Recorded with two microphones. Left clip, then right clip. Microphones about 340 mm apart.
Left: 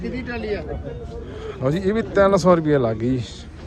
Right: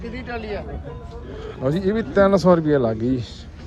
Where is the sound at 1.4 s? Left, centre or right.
Centre.